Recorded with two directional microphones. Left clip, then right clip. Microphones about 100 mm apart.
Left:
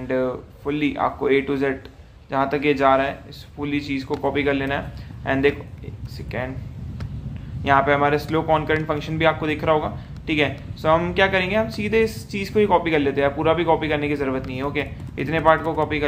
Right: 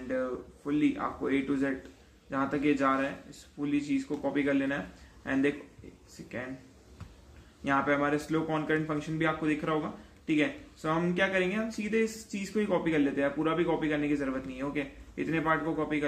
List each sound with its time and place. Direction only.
0.1 s a man's voice: 35° left (ahead or behind)
7.6 s speech: 30° left (ahead or behind)